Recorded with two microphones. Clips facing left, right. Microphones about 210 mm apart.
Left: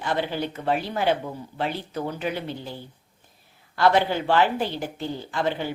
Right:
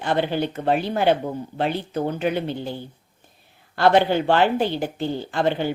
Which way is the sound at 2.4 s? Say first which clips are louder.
Right 6 dB; 25° right (ahead or behind).